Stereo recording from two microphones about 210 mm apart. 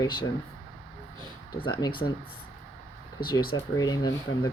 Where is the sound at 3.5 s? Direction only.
20° left (ahead or behind).